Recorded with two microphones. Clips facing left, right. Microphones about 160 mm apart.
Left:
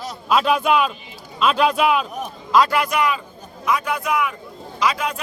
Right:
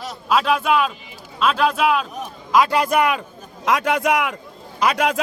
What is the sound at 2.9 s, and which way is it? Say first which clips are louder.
Speech: right 3 dB; 55° right (ahead or behind).